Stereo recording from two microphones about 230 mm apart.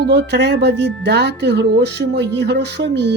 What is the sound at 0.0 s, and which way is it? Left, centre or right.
Speech, right.